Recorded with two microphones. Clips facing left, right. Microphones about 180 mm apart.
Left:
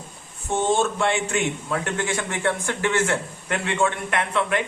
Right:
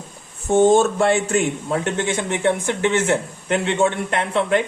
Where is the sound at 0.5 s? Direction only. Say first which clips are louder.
Right 8 dB; 40° right (ahead or behind).